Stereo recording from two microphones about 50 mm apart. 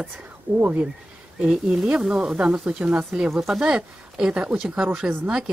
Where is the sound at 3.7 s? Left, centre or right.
Centre.